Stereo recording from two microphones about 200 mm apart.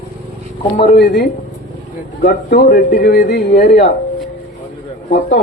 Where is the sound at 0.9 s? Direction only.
55° left (ahead or behind).